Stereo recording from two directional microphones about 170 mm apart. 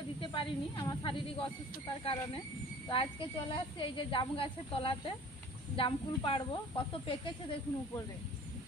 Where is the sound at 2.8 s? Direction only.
30° left (ahead or behind).